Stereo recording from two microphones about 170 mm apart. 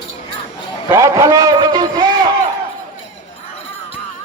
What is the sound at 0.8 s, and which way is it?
A man's voice, 20° right (ahead or behind).